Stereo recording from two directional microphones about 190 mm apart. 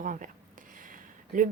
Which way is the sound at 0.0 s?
45° right (ahead or behind).